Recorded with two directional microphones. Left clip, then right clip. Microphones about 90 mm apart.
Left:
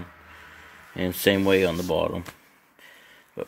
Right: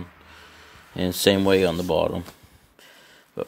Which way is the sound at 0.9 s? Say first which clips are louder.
Right 2 dB; 35° right (ahead or behind).